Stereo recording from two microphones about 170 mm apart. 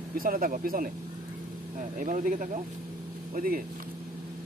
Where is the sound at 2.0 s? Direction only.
50° right (ahead or behind).